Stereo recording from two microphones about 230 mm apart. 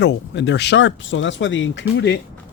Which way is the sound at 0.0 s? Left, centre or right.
Left.